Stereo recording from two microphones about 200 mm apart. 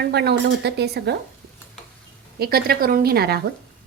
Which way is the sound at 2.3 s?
50° right (ahead or behind).